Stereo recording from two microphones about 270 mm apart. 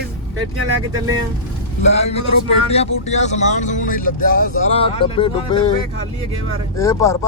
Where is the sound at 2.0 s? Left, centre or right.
Left.